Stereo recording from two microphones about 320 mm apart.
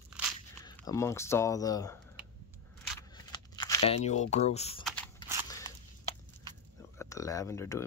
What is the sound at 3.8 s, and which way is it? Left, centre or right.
Speech, centre.